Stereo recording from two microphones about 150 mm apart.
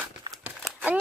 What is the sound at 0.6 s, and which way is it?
Crumpling, 10° right (ahead or behind).